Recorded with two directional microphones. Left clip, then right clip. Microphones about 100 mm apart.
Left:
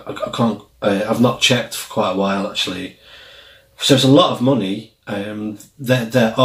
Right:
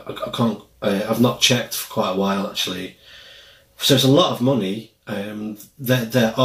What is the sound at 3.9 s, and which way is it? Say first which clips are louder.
Speech: left 3 dB; 5° left (ahead or behind).